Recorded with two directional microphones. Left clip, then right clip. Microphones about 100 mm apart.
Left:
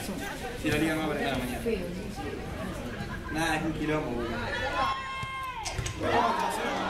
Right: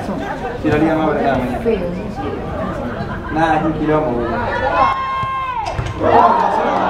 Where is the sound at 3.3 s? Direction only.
30° left (ahead or behind).